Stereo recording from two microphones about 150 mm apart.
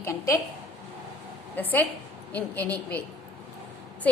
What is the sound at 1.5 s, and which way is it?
A woman's voice, 10° left (ahead or behind).